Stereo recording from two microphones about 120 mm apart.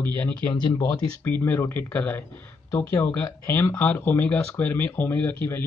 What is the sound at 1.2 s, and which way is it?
Speech, 15° left (ahead or behind).